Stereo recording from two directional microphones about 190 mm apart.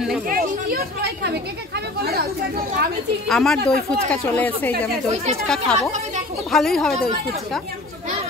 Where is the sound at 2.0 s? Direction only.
55° right (ahead or behind).